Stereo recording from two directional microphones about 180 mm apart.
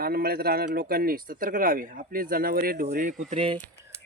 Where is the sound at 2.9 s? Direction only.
45° right (ahead or behind).